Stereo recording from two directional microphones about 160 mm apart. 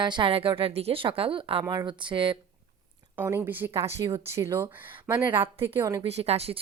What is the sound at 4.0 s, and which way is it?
Speech, 25° right (ahead or behind).